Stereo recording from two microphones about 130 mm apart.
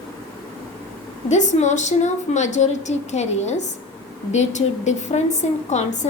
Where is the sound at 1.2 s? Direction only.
65° left (ahead or behind).